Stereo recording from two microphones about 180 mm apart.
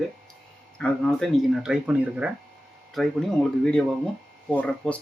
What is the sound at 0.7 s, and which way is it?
Speech, 5° left (ahead or behind).